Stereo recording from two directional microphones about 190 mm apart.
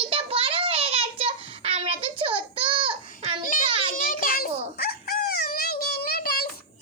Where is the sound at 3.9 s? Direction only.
50° left (ahead or behind).